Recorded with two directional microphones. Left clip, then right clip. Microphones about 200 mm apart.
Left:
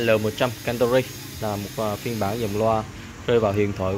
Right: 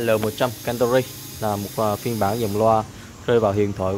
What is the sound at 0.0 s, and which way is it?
Speech, 10° right (ahead or behind).